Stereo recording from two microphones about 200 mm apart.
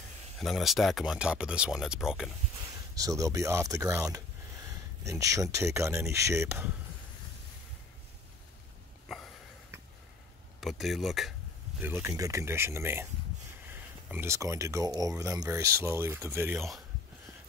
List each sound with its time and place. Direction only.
0.4 s speech: centre (ahead or behind)
3.0 s speech: 15° right (ahead or behind)
10.6 s speech: centre (ahead or behind)
11.8 s speech: 10° right (ahead or behind)